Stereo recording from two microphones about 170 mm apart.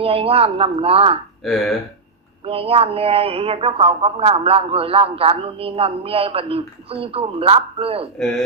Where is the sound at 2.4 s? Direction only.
35° right (ahead or behind).